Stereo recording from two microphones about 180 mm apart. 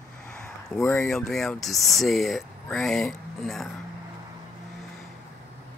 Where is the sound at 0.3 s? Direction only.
5° left (ahead or behind).